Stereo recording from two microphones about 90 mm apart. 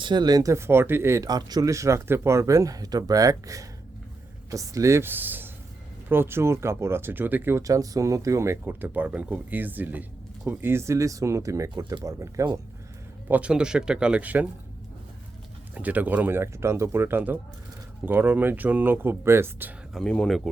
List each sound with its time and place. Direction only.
0.0 s speech: 55° right (ahead or behind); by 1.3 s 30° right (ahead or behind)
1.3 s speech: 45° right (ahead or behind); by 7.6 s 25° right (ahead or behind)
7.6 s speech: 40° right (ahead or behind)
13.2 s speech: 15° right (ahead or behind)
15.7 s speech: 15° right (ahead or behind)
19.9 s speech: 10° left (ahead or behind)